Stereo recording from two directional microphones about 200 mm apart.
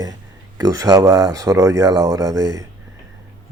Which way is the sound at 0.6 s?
20° right (ahead or behind).